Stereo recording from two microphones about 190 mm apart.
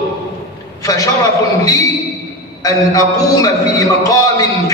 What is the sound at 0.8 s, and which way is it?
A man's voice, 20° left (ahead or behind).